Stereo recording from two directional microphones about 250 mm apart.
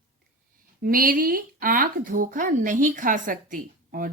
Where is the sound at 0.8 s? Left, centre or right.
Right.